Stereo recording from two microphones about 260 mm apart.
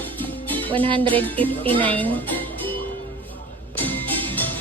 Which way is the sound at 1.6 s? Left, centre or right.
Centre.